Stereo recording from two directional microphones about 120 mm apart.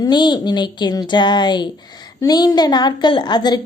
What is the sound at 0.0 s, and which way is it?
A woman's voice, 35° left (ahead or behind).